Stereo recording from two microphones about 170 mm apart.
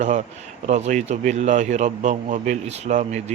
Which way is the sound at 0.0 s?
45° right (ahead or behind).